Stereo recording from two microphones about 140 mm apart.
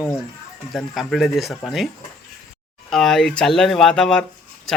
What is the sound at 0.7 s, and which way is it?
Speech, centre (ahead or behind).